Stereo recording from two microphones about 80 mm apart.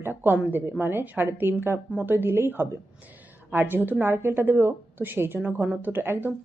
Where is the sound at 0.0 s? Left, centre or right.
Right.